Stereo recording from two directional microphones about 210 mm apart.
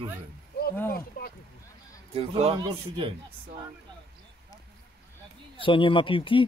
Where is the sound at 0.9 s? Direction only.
45° left (ahead or behind).